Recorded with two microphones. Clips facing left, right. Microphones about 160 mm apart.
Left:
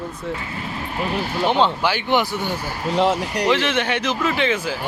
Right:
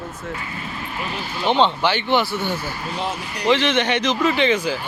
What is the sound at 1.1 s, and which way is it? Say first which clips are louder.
Speech: left 8 dB; 60° left (ahead or behind).